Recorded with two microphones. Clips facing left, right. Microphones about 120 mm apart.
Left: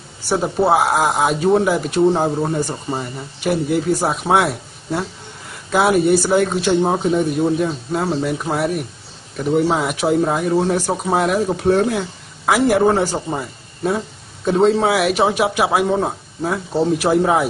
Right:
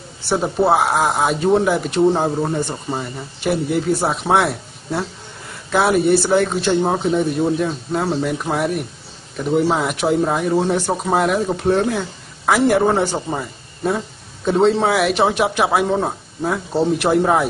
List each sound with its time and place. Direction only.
0.4 s a man's voice: centre (ahead or behind)